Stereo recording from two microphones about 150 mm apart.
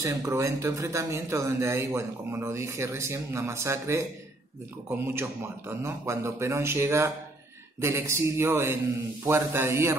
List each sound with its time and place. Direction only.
0.0 s speech: 20° right (ahead or behind)